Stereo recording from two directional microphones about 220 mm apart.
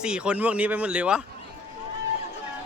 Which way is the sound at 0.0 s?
5° right (ahead or behind).